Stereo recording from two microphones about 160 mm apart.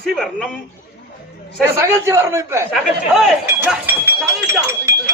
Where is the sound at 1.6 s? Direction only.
15° right (ahead or behind).